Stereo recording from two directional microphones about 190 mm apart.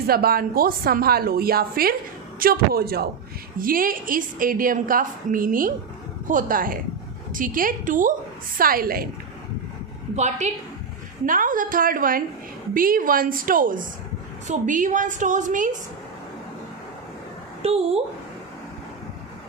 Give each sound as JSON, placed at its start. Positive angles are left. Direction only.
{"t": 0.1, "sound": "a woman's voice", "side_deg": -50}
{"t": 10.2, "sound": "a woman's voice", "side_deg": -40}
{"t": 17.6, "sound": "a woman's voice", "side_deg": -30}